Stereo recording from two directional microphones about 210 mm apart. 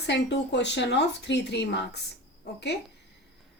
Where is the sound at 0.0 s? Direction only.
55° left (ahead or behind).